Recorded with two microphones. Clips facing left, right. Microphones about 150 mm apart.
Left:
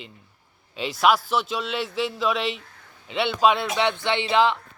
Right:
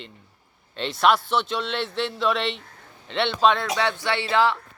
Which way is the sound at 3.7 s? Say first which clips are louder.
Left 1 dB; 20° left (ahead or behind).